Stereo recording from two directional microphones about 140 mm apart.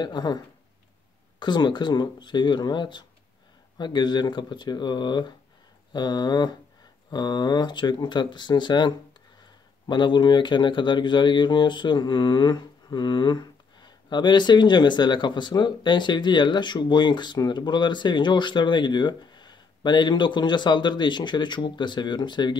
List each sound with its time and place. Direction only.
0.0 s speech: 30° left (ahead or behind)
1.4 s speech: 35° left (ahead or behind)